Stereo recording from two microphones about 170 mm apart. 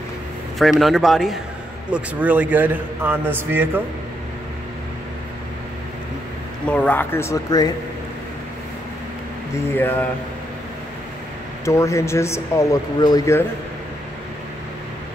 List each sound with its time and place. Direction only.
0.6 s a man's voice: centre (ahead or behind)
6.6 s a man's voice: 10° left (ahead or behind)
9.7 s a man's voice: 10° left (ahead or behind)
11.6 s a man's voice: 15° left (ahead or behind)